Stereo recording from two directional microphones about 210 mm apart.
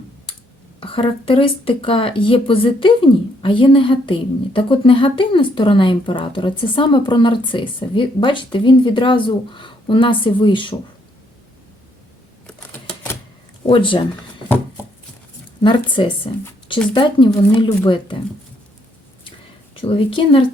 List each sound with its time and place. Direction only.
0.8 s speech: 25° left (ahead or behind)
13.7 s speech: 25° left (ahead or behind)
15.6 s speech: 25° left (ahead or behind)
19.7 s speech: 25° left (ahead or behind)